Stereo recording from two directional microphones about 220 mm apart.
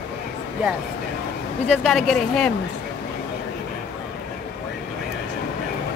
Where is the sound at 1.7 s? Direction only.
Centre (ahead or behind).